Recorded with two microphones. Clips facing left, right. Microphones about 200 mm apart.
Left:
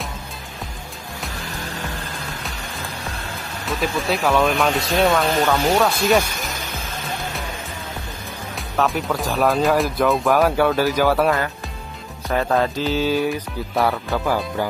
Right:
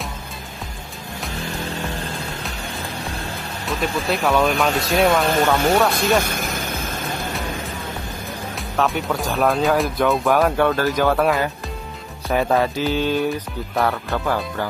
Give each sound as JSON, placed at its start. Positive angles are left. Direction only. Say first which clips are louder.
{"t": 3.6, "sound": "speech", "louder": "even", "side_deg": 0}
{"t": 8.7, "sound": "speech", "louder": "even", "side_deg": 0}